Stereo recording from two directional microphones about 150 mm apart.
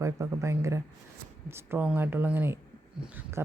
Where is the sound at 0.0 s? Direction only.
20° right (ahead or behind).